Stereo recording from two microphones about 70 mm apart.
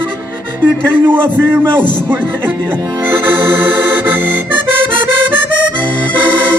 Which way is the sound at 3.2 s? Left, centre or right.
Right.